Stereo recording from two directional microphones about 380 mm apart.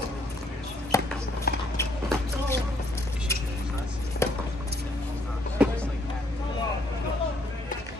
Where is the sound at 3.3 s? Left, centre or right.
Centre.